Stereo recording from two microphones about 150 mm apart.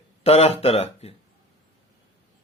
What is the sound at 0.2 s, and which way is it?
Speech, 45° left (ahead or behind).